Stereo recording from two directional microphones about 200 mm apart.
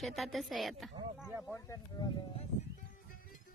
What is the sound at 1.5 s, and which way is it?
Speech, 15° left (ahead or behind).